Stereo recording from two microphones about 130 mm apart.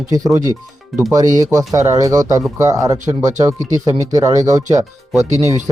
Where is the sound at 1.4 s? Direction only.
25° right (ahead or behind).